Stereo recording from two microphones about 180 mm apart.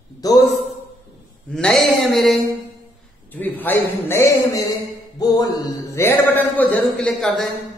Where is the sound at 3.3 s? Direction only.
10° left (ahead or behind).